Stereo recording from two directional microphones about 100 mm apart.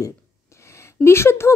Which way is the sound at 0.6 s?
25° left (ahead or behind).